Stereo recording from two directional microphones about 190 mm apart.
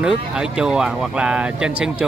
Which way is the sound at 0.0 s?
5° right (ahead or behind).